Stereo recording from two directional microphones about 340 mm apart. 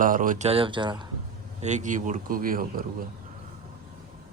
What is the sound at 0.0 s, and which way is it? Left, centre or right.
Speech, right.